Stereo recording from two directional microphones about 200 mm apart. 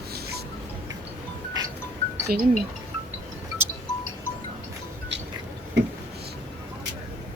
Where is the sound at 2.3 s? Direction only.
45° right (ahead or behind).